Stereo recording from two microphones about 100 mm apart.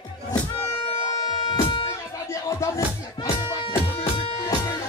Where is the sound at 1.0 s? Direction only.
45° left (ahead or behind).